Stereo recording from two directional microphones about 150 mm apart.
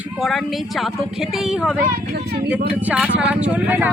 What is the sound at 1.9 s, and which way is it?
Speech, 80° right.